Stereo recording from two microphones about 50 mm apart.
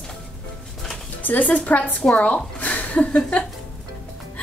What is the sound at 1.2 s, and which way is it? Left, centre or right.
Speech, left.